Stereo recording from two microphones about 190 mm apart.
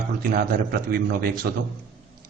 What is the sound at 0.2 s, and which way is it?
Speech, 50° right (ahead or behind).